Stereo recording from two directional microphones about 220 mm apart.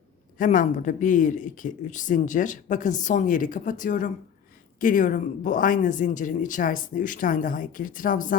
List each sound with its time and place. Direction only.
0.3 s speech: 35° left (ahead or behind)